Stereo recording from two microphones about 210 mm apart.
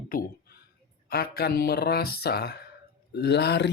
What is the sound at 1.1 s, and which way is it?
Speech, 50° left (ahead or behind).